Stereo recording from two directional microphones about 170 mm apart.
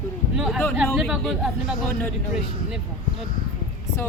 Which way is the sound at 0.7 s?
Centre (ahead or behind).